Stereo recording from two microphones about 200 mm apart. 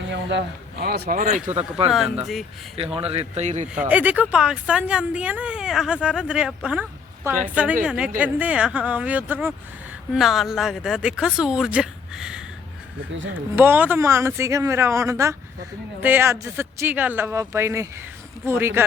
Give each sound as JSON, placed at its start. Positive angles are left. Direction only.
{"t": 0.1, "sound": "speech", "side_deg": -60}
{"t": 2.2, "sound": "speech", "side_deg": 0}
{"t": 2.7, "sound": "a man's voice", "side_deg": -30}
{"t": 3.8, "sound": "speech", "side_deg": -5}